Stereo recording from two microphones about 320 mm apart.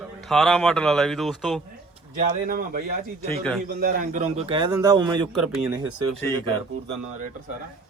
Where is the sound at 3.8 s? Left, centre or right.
Right.